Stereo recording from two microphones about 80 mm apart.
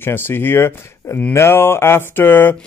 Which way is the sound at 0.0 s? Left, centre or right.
Left.